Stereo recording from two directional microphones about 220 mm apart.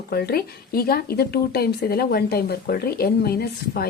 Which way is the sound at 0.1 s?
45° left (ahead or behind).